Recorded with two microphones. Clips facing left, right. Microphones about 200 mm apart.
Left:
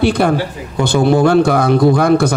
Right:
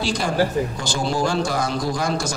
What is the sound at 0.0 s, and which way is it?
A man's voice, 60° left (ahead or behind).